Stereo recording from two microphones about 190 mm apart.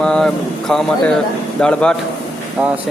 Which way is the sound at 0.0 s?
5° left (ahead or behind).